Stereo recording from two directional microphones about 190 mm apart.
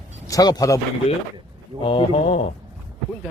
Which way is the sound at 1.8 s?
25° left (ahead or behind).